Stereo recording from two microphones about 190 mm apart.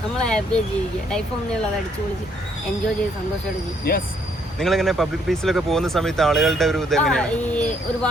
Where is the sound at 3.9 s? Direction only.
55° left (ahead or behind).